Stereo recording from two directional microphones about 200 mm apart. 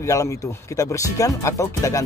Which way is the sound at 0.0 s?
15° left (ahead or behind).